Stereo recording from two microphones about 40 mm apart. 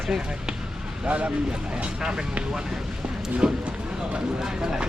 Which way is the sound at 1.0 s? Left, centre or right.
Right.